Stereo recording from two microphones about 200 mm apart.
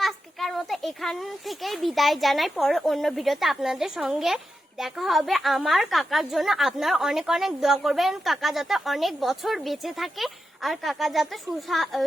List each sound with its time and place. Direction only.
0.0 s a woman's voice: centre (ahead or behind)